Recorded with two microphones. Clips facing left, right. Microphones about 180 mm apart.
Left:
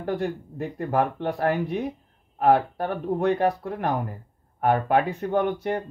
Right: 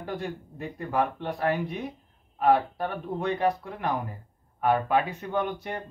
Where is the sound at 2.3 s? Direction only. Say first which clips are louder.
Left 3 dB; 55° left (ahead or behind).